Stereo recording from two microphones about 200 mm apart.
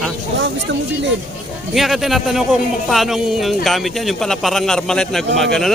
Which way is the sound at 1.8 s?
Centre (ahead or behind).